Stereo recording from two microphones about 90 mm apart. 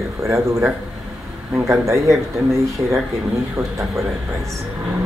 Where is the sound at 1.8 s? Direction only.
35° right (ahead or behind).